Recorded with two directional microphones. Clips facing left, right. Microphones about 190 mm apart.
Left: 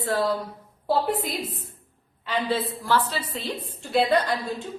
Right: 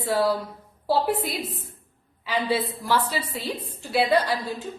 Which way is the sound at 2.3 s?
10° right (ahead or behind).